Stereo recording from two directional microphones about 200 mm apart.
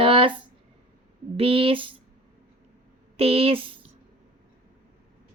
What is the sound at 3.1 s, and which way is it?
Speech, 30° right (ahead or behind).